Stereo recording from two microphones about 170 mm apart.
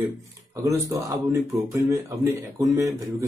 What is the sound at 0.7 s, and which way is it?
A man's voice, 20° right (ahead or behind).